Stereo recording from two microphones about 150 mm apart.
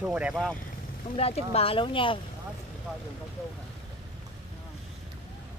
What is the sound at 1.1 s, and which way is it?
Speech, 40° left (ahead or behind).